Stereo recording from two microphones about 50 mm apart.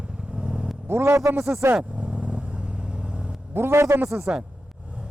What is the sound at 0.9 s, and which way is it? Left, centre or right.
Vehicle, right.